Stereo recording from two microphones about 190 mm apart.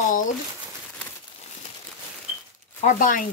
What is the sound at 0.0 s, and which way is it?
Crumpling, 45° left (ahead or behind).